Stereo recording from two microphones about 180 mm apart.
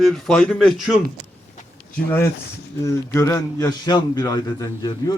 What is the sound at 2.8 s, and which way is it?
A man's voice, 15° left (ahead or behind).